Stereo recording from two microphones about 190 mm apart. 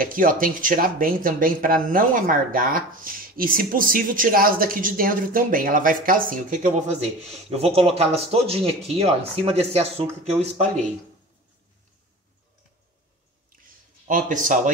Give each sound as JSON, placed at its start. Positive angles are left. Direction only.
{"t": 0.0, "sound": "speech", "side_deg": -45}
{"t": 14.0, "sound": "speech", "side_deg": -40}